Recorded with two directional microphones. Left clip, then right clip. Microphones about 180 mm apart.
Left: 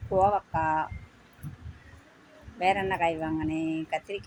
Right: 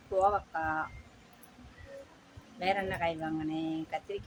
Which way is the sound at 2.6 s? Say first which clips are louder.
Left 6 dB; 15° left (ahead or behind).